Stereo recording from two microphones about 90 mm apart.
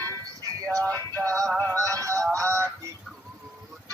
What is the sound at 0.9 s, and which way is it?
Music, 25° left (ahead or behind).